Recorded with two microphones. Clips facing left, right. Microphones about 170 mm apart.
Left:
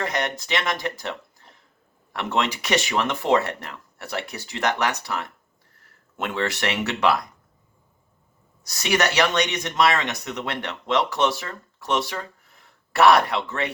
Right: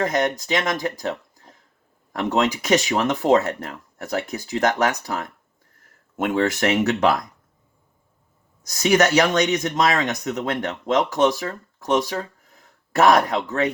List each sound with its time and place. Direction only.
0.0 s speech: 45° right (ahead or behind)
8.7 s speech: 45° right (ahead or behind)